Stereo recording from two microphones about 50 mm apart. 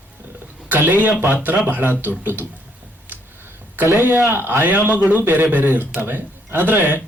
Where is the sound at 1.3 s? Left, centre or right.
Right.